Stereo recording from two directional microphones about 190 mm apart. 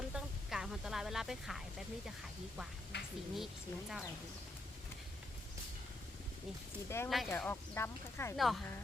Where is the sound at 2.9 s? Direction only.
60° left (ahead or behind).